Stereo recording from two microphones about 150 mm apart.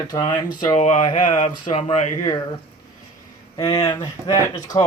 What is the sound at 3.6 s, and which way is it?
Speech, 25° left (ahead or behind).